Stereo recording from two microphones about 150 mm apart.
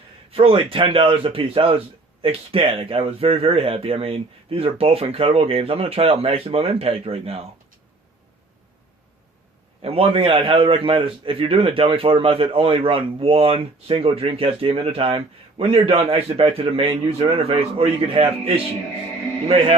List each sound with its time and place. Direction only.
0.3 s a man's voice: 40° right (ahead or behind)
9.8 s a man's voice: 40° right (ahead or behind)